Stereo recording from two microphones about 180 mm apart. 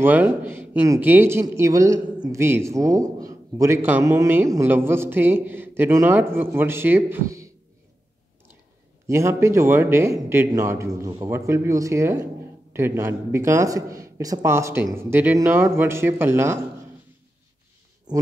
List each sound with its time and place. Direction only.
0.0 s a man's voice: 10° right (ahead or behind)
9.0 s a man's voice: 15° right (ahead or behind)